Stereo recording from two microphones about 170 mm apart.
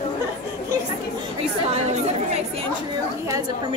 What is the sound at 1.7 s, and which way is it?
Chatter, 40° right (ahead or behind).